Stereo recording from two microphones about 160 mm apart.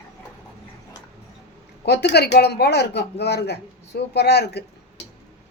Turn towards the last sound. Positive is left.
turn(degrees=90)